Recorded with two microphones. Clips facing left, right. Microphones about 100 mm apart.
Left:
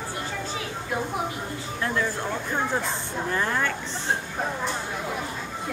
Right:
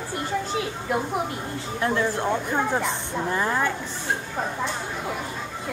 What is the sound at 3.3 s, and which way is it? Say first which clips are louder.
Speech: right 2 dB; 15° right (ahead or behind).